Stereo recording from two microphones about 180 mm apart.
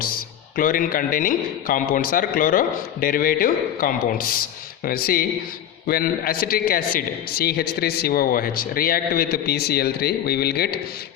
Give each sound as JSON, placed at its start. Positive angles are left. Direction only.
{"t": 0.5, "sound": "a man's voice", "side_deg": 50}